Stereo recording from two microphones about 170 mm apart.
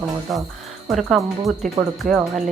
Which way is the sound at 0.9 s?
Centre (ahead or behind).